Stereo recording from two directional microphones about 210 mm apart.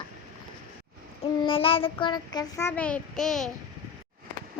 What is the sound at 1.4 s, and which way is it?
Child singing, 25° left (ahead or behind).